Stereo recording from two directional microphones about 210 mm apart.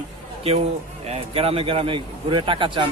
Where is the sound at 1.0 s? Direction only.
30° right (ahead or behind).